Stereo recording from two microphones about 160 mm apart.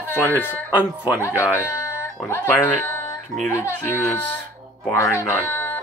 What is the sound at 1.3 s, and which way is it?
Speech, 15° left (ahead or behind).